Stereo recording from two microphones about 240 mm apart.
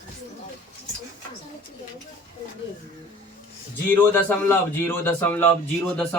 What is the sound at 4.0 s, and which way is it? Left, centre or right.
A man's voice, centre.